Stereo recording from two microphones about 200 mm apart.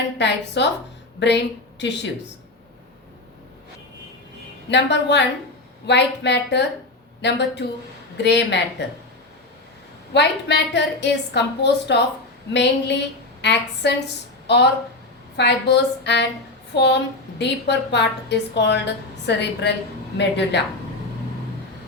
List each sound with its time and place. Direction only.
0.2 s a woman's voice: 60° left (ahead or behind)
4.7 s a woman's voice: 60° left (ahead or behind)
10.1 s a woman's voice: 60° left (ahead or behind)